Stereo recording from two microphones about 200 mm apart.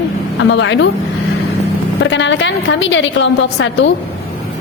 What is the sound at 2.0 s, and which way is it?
A woman's voice, 65° left (ahead or behind).